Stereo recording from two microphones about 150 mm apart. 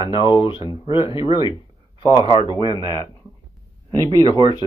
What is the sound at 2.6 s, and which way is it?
Speech, 25° left (ahead or behind).